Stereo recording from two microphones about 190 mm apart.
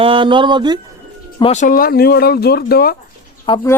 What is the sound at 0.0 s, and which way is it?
Speech, 25° right (ahead or behind).